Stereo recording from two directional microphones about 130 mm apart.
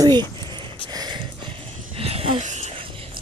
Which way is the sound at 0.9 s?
30° right (ahead or behind).